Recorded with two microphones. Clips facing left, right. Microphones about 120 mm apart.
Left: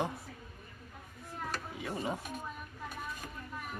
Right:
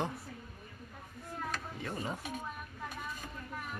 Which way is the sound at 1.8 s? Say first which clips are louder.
Left 3 dB; 10° left (ahead or behind).